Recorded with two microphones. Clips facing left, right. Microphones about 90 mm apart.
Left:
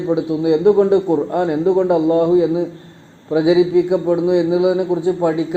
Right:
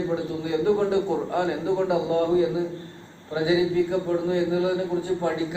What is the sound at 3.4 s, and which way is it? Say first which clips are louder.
Speech: left 8 dB; 75° left (ahead or behind).